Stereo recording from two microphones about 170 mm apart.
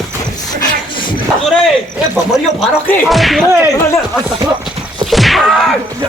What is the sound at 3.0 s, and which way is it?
Speech, centre (ahead or behind).